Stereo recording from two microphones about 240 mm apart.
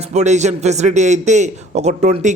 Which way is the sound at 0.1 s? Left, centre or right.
Right.